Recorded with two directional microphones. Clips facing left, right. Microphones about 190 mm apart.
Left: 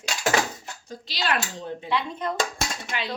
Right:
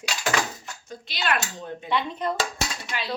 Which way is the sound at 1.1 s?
35° left (ahead or behind).